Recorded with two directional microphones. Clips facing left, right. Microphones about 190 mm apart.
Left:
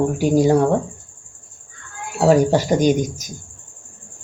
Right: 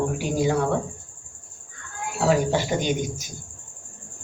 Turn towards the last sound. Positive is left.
turn(degrees=40)  # may be behind; listen again after turning